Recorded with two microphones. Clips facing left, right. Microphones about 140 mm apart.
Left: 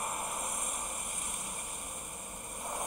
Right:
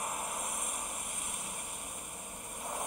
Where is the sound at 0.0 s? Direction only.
Centre (ahead or behind).